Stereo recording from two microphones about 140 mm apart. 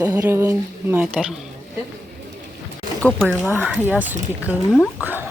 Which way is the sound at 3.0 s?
5° left (ahead or behind).